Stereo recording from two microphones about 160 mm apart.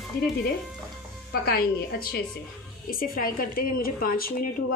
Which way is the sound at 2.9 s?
65° left (ahead or behind).